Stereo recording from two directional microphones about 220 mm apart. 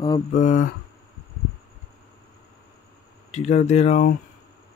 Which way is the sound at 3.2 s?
30° left (ahead or behind).